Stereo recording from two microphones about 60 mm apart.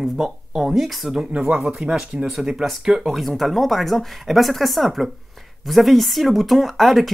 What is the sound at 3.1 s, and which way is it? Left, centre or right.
Speech, centre.